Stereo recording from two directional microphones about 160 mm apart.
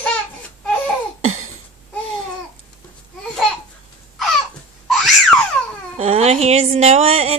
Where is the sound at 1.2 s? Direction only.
45° right (ahead or behind).